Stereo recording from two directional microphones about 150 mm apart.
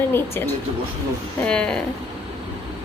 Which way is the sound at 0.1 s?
15° left (ahead or behind).